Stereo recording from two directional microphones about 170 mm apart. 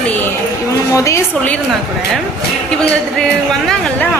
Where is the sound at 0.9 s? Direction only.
15° left (ahead or behind).